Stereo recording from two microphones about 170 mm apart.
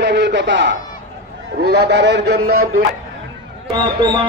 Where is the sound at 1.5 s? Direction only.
70° right (ahead or behind).